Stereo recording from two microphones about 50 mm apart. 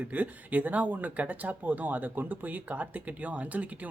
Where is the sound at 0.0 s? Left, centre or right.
Right.